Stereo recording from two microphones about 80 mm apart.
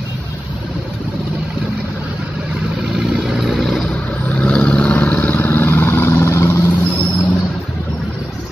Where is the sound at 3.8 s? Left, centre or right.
Centre; by 6.7 s left.